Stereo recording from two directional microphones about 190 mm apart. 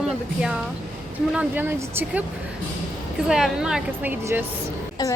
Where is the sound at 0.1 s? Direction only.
5° right (ahead or behind).